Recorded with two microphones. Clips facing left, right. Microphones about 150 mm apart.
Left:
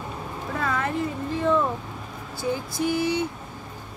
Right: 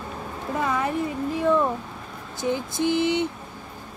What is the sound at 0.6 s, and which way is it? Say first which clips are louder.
Speech: right 2 dB; 15° right (ahead or behind).